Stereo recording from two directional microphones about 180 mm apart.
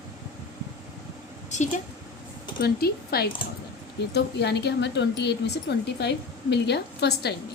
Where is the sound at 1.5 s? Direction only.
40° left (ahead or behind).